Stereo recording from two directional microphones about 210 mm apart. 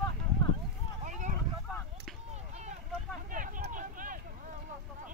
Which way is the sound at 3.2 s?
40° right (ahead or behind).